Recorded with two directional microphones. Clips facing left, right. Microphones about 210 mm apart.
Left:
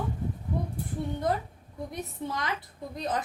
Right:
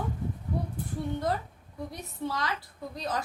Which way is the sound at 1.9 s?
20° left (ahead or behind).